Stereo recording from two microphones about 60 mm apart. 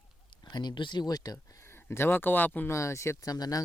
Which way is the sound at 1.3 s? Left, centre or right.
Left.